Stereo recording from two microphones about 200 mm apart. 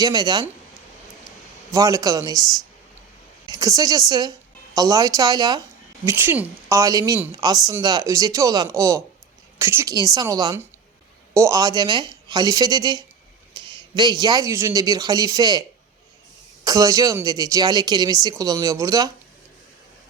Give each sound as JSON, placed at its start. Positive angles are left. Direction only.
{"t": 0.0, "sound": "speech", "side_deg": -20}
{"t": 1.7, "sound": "a woman's voice", "side_deg": -15}
{"t": 16.6, "sound": "speech", "side_deg": -15}